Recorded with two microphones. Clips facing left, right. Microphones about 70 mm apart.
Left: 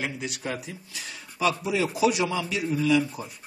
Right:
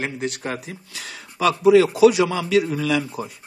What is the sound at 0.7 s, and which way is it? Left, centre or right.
Speech, right.